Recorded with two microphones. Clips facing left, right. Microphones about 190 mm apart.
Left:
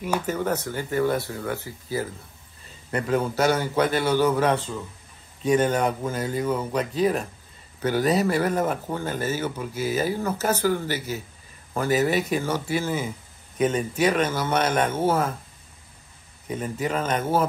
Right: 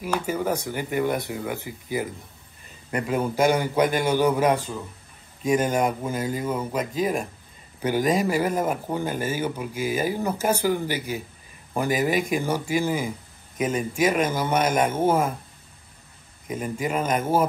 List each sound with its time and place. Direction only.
0.3 s speech: 10° right (ahead or behind)
16.4 s speech: 10° right (ahead or behind)